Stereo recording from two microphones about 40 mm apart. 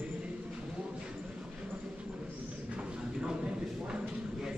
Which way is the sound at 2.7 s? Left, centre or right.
Right.